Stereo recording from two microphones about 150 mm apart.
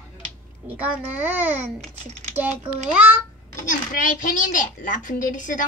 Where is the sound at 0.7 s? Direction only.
10° right (ahead or behind).